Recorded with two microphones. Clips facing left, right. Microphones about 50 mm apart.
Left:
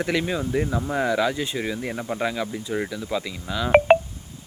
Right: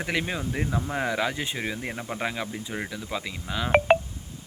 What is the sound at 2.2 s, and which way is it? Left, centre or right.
Speech, right.